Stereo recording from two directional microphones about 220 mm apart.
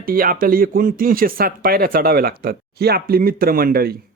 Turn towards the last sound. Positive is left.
turn(degrees=-40)  # may be behind; listen again after turning